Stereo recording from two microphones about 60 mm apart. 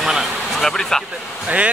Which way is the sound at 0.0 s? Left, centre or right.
Centre.